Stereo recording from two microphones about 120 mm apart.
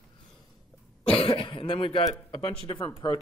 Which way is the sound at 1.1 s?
50° left (ahead or behind).